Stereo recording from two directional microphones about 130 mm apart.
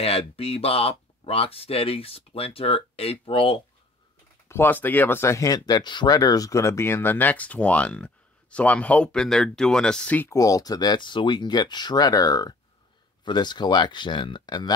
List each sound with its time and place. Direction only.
0.0 s speech: 50° left (ahead or behind)
4.5 s speech: 15° left (ahead or behind)
10.3 s speech: 25° left (ahead or behind)